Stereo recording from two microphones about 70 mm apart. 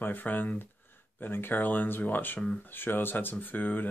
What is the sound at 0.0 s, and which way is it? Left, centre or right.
Speech, left.